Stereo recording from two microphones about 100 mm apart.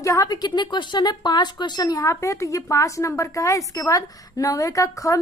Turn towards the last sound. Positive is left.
turn(degrees=35)  # may be behind; listen again after turning